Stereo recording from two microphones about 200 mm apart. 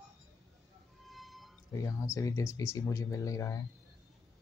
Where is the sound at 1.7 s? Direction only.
15° left (ahead or behind).